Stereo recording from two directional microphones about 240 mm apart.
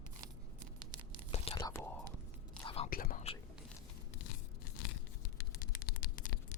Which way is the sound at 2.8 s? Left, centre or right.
Left.